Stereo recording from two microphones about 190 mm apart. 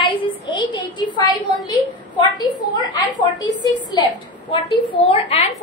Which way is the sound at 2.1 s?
25° left (ahead or behind).